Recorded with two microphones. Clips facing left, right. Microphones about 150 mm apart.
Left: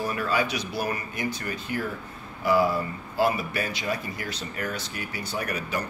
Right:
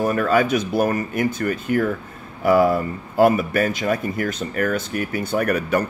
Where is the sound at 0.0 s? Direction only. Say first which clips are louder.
Right 8 dB; 50° right (ahead or behind).